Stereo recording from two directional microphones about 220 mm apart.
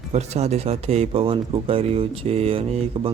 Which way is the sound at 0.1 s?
30° right (ahead or behind).